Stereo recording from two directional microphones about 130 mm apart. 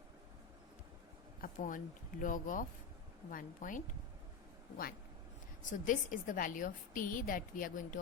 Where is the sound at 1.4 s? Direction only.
90° left.